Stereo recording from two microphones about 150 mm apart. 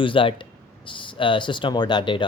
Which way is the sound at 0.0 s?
35° left (ahead or behind).